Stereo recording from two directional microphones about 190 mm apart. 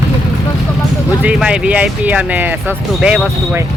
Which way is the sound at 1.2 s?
5° right (ahead or behind).